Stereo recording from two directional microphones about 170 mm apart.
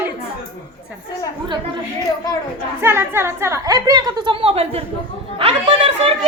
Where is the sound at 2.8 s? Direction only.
15° right (ahead or behind).